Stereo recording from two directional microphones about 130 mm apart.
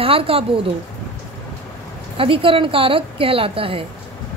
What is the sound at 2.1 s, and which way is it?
Speech, 45° right (ahead or behind).